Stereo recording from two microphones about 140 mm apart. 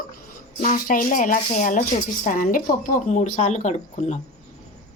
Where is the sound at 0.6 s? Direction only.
85° left; by 4.2 s 55° left (ahead or behind).